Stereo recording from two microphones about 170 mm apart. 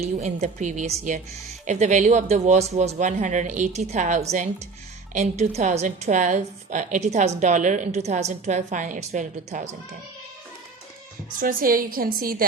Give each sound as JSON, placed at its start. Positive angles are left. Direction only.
{"t": 0.0, "sound": "a woman's voice", "side_deg": -40}
{"t": 11.3, "sound": "a woman's voice", "side_deg": -55}